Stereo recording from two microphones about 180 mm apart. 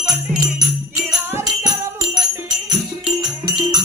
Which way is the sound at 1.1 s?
20° right (ahead or behind).